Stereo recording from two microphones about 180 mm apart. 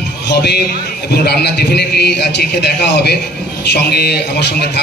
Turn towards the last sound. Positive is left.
turn(degrees=65)  # may be behind; listen again after turning